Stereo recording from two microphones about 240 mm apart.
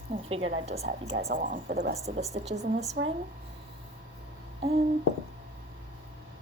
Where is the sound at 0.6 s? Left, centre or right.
Right.